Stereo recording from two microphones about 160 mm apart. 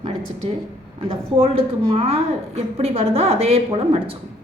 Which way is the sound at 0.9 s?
35° right (ahead or behind).